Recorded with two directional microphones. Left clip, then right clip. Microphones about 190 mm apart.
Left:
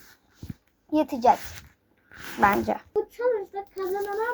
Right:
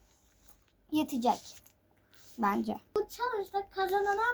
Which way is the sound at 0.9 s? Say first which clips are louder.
Left 9 dB; 10° left (ahead or behind).